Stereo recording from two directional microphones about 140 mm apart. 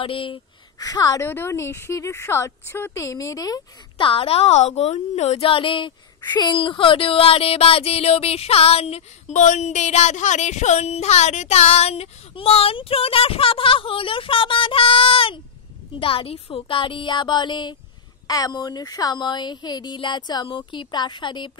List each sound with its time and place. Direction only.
0.0 s a woman's voice: 40° left (ahead or behind)
0.7 s speech: 25° left (ahead or behind)
1.2 s speech: 15° left (ahead or behind)
4.1 s a woman's voice: 45° left (ahead or behind)